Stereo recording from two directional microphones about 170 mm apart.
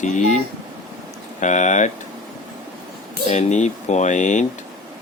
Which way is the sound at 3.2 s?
40° left (ahead or behind).